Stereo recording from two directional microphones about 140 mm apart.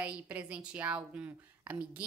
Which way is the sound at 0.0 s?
10° right (ahead or behind).